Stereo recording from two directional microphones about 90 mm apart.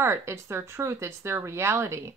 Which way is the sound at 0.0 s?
30° right (ahead or behind).